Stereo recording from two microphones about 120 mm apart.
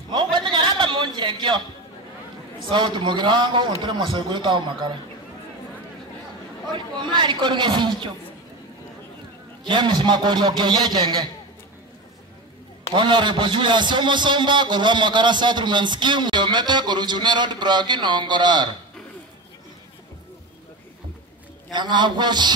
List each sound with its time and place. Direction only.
0.1 s a sound: 40° right (ahead or behind)
2.7 s a man's voice: 40° right (ahead or behind)
6.7 s a man's voice: 40° right (ahead or behind)
9.7 s a man's voice: 40° right (ahead or behind)
12.9 s a man's voice: 40° right (ahead or behind)
21.7 s a man's voice: 40° right (ahead or behind)